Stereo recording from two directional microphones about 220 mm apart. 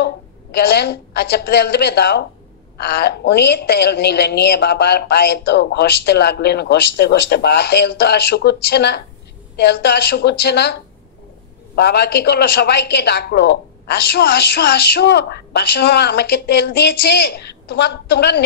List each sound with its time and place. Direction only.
0.0 s a woman's voice: 50° left (ahead or behind)